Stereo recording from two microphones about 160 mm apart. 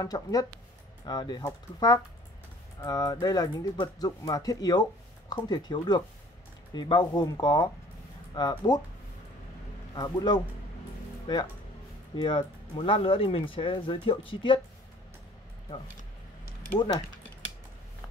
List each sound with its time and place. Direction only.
0.0 s speech: 25° left (ahead or behind)
9.9 s speech: 25° left (ahead or behind)
12.2 s speech: 30° left (ahead or behind)